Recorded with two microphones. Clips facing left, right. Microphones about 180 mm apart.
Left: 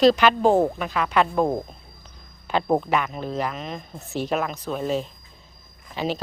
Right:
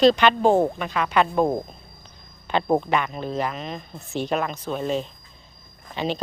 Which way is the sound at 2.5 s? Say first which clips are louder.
Even; 5° left (ahead or behind).